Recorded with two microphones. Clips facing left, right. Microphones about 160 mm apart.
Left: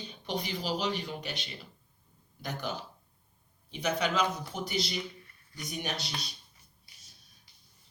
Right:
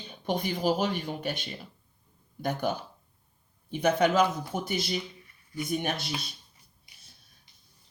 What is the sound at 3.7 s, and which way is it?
Speech, 50° right (ahead or behind).